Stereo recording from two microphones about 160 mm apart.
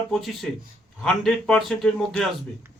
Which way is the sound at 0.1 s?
Centre (ahead or behind).